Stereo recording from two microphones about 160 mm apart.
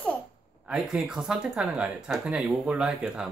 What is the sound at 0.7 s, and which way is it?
Speech, 5° right (ahead or behind).